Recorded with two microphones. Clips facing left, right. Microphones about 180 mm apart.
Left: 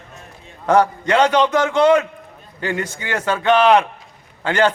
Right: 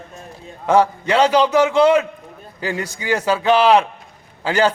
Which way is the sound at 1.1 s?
10° right (ahead or behind).